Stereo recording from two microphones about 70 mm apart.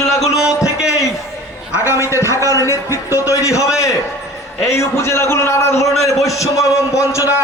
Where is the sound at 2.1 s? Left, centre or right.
Left.